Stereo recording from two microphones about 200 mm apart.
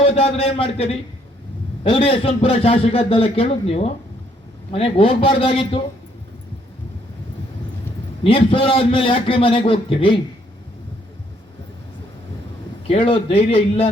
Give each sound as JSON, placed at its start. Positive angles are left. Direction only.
{"t": 0.0, "sound": "a man's voice", "side_deg": 30}
{"t": 8.2, "sound": "a man's voice", "side_deg": 25}
{"t": 12.9, "sound": "a man's voice", "side_deg": 25}